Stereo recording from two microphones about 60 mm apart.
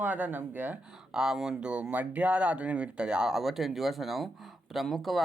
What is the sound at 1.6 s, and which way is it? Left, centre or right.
Speech, right.